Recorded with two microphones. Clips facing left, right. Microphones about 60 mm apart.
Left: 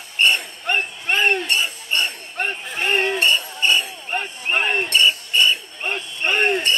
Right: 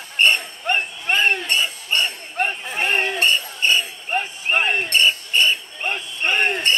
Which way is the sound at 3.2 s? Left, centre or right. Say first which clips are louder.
Even; right.